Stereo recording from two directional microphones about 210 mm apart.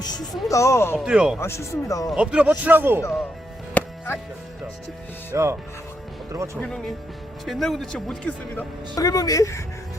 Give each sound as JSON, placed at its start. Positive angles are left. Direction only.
{"t": 0.5, "sound": "speech", "side_deg": 15}
{"t": 0.9, "sound": "speech", "side_deg": -5}
{"t": 1.4, "sound": "speech", "side_deg": 10}
{"t": 2.1, "sound": "a man's voice", "side_deg": -5}
{"t": 3.8, "sound": "chopping", "side_deg": 10}
{"t": 5.3, "sound": "a man's voice", "side_deg": -15}
{"t": 6.6, "sound": "speech", "side_deg": 0}
{"t": 9.0, "sound": "speech", "side_deg": 15}